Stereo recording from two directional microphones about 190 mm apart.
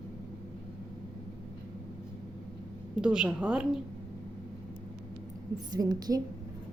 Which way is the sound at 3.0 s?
5° right (ahead or behind).